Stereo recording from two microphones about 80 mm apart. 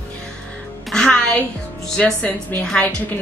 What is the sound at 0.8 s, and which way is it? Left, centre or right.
Music, centre.